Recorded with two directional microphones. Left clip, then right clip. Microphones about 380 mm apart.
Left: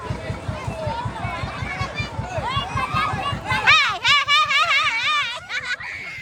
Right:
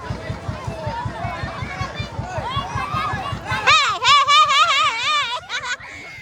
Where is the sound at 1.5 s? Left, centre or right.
Right.